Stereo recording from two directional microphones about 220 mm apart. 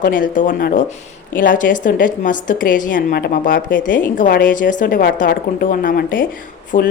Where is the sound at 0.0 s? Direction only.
40° left (ahead or behind).